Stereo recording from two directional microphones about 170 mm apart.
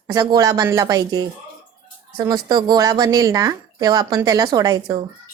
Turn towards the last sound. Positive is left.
turn(degrees=-20)  # may be behind; listen again after turning